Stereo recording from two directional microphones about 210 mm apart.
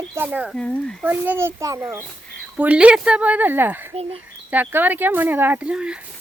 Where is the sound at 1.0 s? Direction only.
10° right (ahead or behind).